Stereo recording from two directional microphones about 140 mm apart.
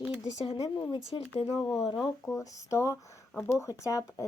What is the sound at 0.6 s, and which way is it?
Speech, 35° left (ahead or behind).